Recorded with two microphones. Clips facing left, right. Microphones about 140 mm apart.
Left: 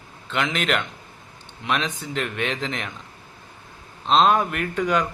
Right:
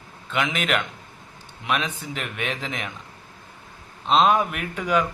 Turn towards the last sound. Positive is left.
turn(degrees=-10)  # may be behind; listen again after turning